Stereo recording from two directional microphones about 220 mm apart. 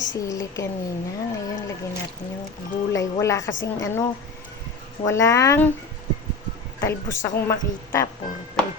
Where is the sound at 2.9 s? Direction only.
15° left (ahead or behind).